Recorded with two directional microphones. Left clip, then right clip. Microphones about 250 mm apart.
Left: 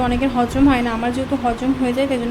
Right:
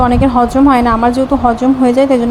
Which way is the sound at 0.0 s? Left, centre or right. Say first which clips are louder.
Right 8 dB; right.